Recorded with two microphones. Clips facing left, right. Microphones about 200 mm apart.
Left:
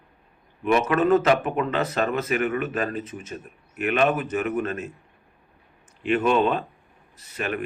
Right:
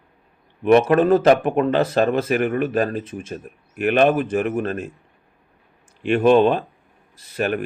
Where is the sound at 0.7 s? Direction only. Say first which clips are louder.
Right 5 dB; 35° right (ahead or behind).